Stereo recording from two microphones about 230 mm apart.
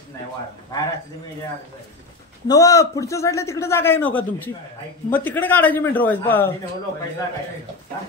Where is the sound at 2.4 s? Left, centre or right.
Centre.